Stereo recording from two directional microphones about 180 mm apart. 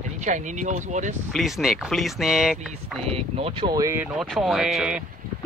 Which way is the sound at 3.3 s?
35° right (ahead or behind).